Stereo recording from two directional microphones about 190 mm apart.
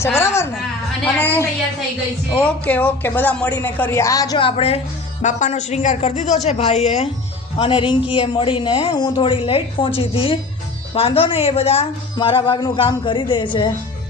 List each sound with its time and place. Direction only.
0.0 s a man's voice: 15° left (ahead or behind)